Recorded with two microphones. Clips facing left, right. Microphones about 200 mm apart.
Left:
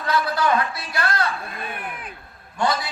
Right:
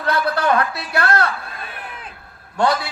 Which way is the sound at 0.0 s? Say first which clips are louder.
Right 2 dB; 65° right (ahead or behind).